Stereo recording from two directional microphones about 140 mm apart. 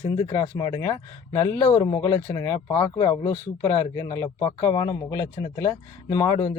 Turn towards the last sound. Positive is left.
turn(degrees=25)  # may be behind; listen again after turning